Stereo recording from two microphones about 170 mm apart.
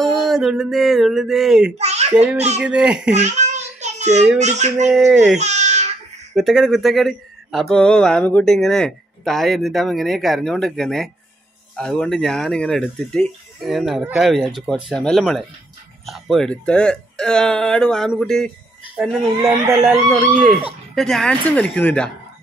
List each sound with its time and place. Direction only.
0.0 s a sound: centre (ahead or behind)
1.8 s a sound: 40° right (ahead or behind)
2.6 s a child's voice: 5° right (ahead or behind)
3.2 s child singing: 45° right (ahead or behind)
4.4 s speech: 40° right (ahead or behind)
4.8 s speech: 5° right (ahead or behind)
5.4 s babbling: 40° right (ahead or behind)
6.3 s speech: centre (ahead or behind)
19.7 s a child's voice: 15° right (ahead or behind)
20.1 s a woman's voice: 5° left (ahead or behind)